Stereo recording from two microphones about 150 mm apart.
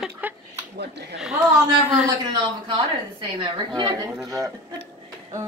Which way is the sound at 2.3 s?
30° right (ahead or behind).